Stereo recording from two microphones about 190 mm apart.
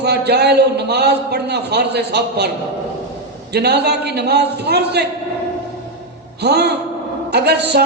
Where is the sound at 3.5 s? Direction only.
60° right (ahead or behind).